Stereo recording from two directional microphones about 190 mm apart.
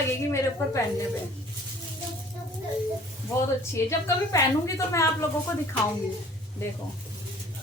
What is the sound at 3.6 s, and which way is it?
A woman's voice, 15° left (ahead or behind).